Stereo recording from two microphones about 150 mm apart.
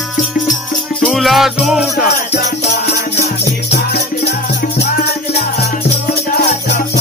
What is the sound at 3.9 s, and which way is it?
Music, 90° left.